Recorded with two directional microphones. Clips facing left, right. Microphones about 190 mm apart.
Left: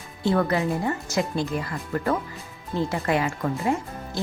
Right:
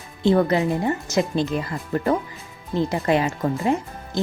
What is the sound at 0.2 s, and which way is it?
Speech, 20° right (ahead or behind).